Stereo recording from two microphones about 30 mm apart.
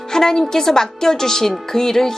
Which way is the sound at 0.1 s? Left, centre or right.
Centre.